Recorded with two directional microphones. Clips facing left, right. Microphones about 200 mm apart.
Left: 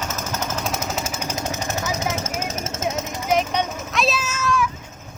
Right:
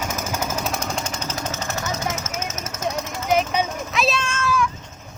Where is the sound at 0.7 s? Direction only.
5° left (ahead or behind).